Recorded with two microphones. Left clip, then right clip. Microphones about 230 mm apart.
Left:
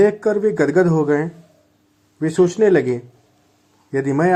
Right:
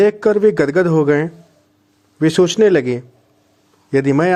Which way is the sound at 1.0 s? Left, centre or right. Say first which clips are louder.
Right 3 dB; right.